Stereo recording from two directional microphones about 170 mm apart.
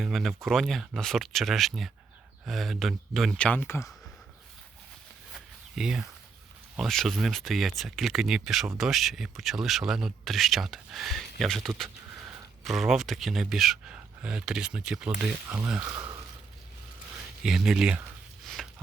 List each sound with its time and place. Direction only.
0.0 s speech: centre (ahead or behind)
5.3 s zipper: 5° right (ahead or behind)
6.7 s speech: centre (ahead or behind)
15.9 s speech: 25° right (ahead or behind)
17.4 s speech: 5° right (ahead or behind)
18.4 s a sound: centre (ahead or behind)